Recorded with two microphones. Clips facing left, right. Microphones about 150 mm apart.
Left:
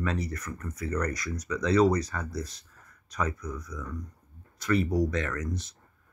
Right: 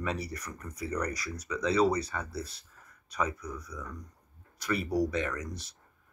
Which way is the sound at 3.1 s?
10° right (ahead or behind).